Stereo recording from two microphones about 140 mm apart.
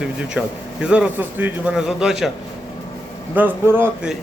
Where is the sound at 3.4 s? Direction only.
15° right (ahead or behind).